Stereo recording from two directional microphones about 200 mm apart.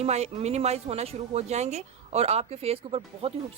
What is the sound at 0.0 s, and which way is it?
Speech, 35° right (ahead or behind).